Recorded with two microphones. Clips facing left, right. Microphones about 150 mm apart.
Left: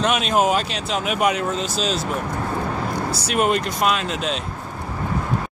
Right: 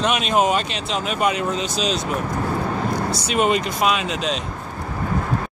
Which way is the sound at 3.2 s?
Centre (ahead or behind).